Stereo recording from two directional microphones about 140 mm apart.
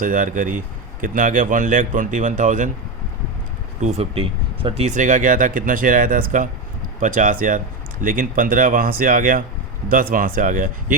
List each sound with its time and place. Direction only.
0.0 s speech: 70° right (ahead or behind)
3.8 s speech: 50° right (ahead or behind); by 9.4 s 80° right
9.9 s speech: 90° right; by 10.9 s 70° right (ahead or behind)